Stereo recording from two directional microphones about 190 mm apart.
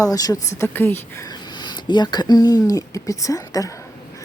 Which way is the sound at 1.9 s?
20° left (ahead or behind).